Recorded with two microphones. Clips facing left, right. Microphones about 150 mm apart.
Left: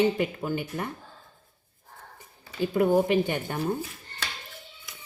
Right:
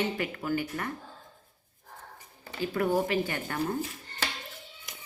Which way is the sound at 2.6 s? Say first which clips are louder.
Left 5 dB; 20° left (ahead or behind).